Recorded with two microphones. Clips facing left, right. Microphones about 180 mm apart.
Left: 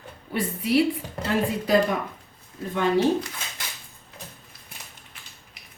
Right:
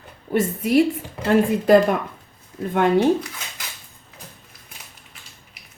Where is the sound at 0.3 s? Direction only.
45° right (ahead or behind).